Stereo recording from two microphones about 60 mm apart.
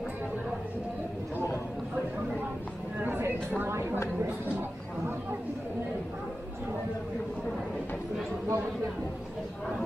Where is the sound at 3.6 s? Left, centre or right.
Right.